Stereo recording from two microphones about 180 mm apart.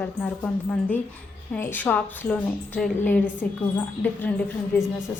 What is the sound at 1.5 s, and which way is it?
A woman's voice, 10° left (ahead or behind).